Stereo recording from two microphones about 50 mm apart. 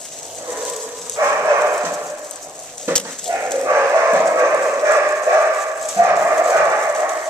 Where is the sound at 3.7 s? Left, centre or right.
Right.